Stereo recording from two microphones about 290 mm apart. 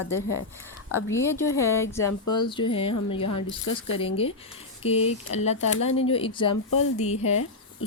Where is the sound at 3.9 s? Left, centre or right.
Centre.